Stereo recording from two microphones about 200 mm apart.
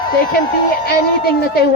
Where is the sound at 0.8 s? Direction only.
50° left (ahead or behind).